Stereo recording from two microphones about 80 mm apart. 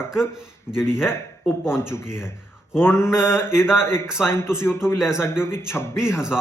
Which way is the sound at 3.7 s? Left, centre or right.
Left.